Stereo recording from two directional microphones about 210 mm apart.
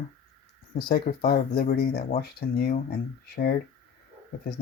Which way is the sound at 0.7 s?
45° left (ahead or behind).